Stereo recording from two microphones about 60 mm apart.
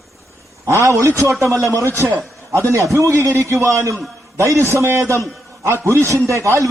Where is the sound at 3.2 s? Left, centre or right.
Right.